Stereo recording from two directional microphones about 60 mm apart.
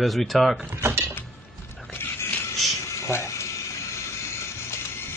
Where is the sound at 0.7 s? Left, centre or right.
Right.